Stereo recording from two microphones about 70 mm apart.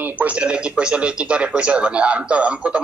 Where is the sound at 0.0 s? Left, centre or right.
Right.